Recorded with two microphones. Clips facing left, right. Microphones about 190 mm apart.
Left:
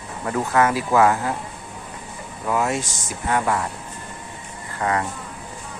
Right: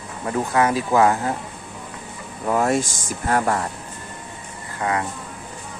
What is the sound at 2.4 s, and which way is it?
Speech, 45° right (ahead or behind).